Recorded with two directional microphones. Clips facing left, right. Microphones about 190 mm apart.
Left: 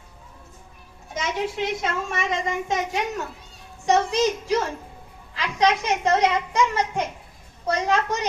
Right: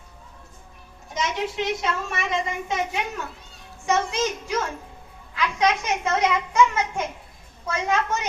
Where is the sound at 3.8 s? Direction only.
35° left (ahead or behind).